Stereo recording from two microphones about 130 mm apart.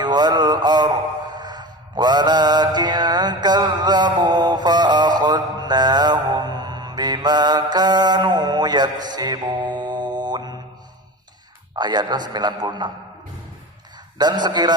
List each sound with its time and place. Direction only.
0.0 s music: 35° right (ahead or behind)
11.7 s a man's voice: 30° right (ahead or behind)
14.2 s a man's voice: 30° right (ahead or behind)